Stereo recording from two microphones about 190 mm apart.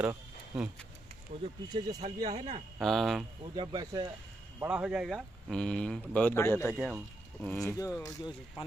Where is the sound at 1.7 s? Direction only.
20° right (ahead or behind).